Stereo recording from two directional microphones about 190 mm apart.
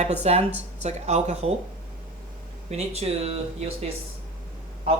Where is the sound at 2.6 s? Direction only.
35° right (ahead or behind).